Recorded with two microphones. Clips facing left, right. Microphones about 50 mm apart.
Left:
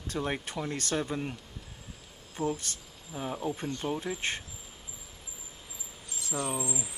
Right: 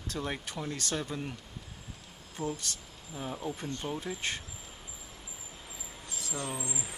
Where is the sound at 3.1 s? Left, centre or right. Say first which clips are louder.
Left 3 dB; centre.